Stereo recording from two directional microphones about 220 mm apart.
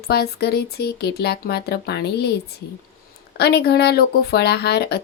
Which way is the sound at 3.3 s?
45° left (ahead or behind).